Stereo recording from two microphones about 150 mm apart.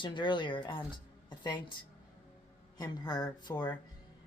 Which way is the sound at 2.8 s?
25° left (ahead or behind).